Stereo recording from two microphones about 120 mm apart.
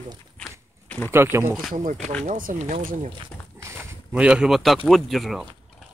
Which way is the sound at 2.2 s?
80° right.